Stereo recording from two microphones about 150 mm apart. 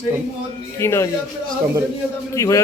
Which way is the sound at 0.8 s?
15° left (ahead or behind).